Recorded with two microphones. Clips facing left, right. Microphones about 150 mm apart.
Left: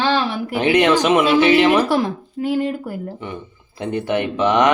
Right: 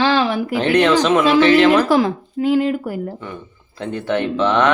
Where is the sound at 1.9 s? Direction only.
90° right.